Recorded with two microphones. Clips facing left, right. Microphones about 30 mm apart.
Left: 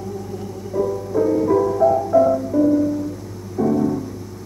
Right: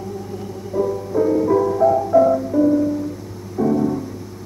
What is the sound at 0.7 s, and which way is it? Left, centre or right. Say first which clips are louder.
Music: right 1 dB; centre.